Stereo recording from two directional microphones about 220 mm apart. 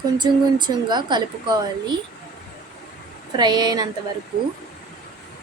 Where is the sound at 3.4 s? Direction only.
20° right (ahead or behind).